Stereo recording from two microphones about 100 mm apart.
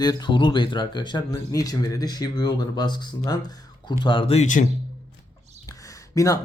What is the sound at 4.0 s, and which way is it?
Speech, 55° left (ahead or behind).